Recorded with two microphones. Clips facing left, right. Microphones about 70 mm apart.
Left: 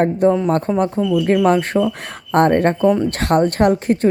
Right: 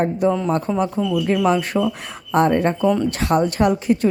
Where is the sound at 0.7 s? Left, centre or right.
Left.